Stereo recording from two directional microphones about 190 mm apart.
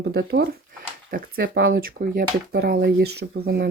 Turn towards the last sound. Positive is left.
turn(degrees=-55)  # may be behind; listen again after turning